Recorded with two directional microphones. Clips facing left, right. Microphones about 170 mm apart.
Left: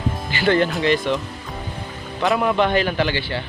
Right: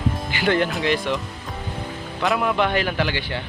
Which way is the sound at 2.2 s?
Centre (ahead or behind).